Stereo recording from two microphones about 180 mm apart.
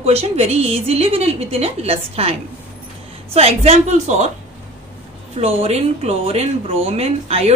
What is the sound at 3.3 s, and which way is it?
Speech, 35° right (ahead or behind).